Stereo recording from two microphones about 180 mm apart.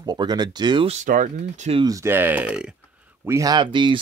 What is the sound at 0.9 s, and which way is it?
Speech, 45° right (ahead or behind).